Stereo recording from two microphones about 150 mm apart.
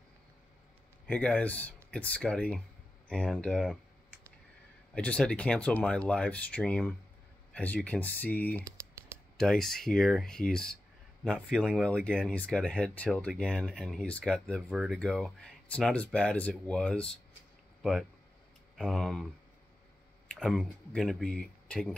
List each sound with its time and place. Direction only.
1.0 s speech: 10° left (ahead or behind)
4.9 s speech: 5° left (ahead or behind)
8.6 s computer keyboard: 20° right (ahead or behind)
9.4 s speech: 5° left (ahead or behind)
11.3 s speech: 10° right (ahead or behind)
18.8 s speech: centre (ahead or behind)
20.3 s speech: centre (ahead or behind)